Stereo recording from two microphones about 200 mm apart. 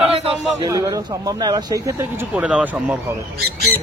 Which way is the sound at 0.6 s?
15° right (ahead or behind).